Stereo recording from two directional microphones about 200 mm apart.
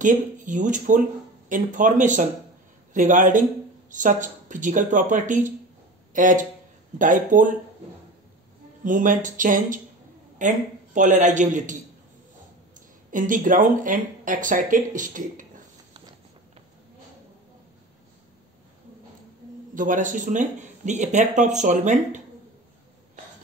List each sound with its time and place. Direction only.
0.0 s speech: 40° right (ahead or behind)
8.8 s speech: 40° right (ahead or behind)
13.1 s speech: 40° right (ahead or behind)
19.7 s speech: 40° right (ahead or behind)